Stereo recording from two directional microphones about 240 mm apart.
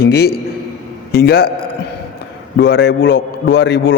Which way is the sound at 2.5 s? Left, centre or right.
Left.